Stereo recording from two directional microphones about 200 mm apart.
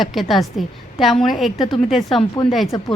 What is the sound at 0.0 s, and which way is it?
A woman's voice, centre (ahead or behind).